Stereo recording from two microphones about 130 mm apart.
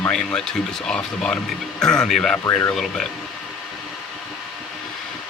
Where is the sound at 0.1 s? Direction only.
5° left (ahead or behind).